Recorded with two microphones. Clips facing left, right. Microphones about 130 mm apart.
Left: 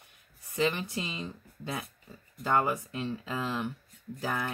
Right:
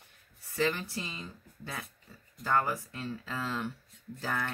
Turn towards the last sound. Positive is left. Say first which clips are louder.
# left 2 dB
turn(degrees=15)  # may be behind; listen again after turning